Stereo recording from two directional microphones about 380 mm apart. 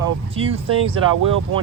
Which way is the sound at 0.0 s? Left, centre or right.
Centre.